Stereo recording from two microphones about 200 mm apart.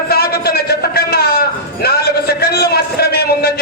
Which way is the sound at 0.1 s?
50° left (ahead or behind).